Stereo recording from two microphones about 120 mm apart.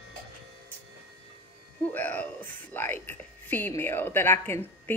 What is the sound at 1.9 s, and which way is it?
Speech, 15° left (ahead or behind).